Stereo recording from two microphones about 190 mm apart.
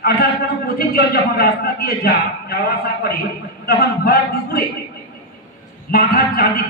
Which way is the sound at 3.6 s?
55° left (ahead or behind).